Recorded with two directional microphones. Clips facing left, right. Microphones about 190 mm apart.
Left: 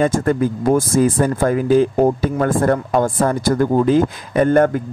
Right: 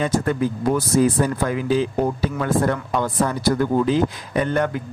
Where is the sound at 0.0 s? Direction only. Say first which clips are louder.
Left 4 dB; 50° left (ahead or behind).